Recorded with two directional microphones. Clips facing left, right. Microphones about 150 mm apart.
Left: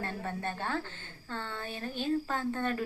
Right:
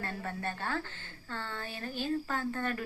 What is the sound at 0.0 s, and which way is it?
A woman's voice, 15° left (ahead or behind).